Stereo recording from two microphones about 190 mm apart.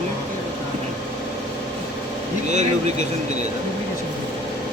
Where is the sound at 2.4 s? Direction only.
40° right (ahead or behind).